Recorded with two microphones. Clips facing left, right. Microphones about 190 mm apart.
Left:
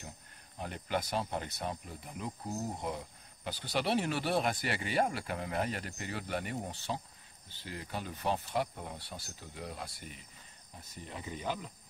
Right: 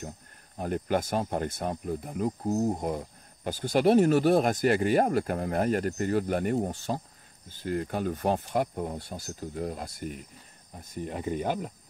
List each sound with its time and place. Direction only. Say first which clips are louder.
0.6 s speech: right 8 dB; 45° right (ahead or behind)